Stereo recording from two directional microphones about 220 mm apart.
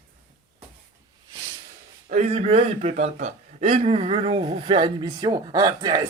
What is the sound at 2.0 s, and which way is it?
A man's voice, 30° right (ahead or behind).